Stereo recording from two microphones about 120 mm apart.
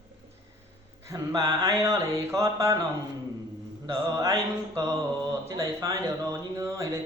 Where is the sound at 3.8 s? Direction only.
30° right (ahead or behind).